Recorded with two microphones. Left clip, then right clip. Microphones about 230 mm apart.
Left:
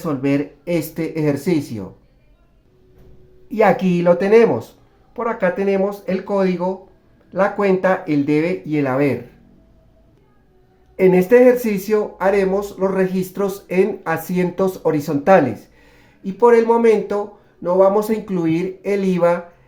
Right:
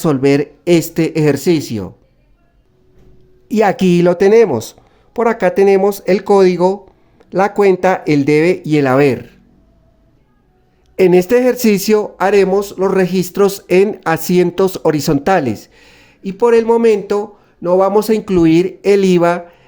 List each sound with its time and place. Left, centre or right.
0.0 s speech: right
3.5 s speech: right
10.9 s speech: right